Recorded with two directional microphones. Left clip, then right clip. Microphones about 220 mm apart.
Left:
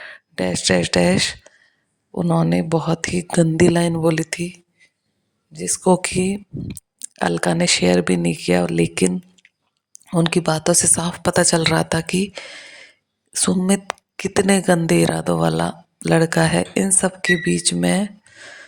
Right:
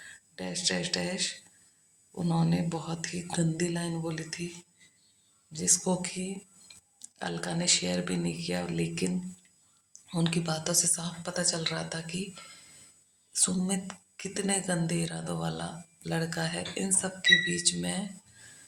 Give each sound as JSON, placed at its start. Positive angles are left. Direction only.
{"t": 0.0, "sound": "speech", "side_deg": 45}
{"t": 9.4, "sound": "chewing", "side_deg": 40}
{"t": 9.9, "sound": "speech", "side_deg": 40}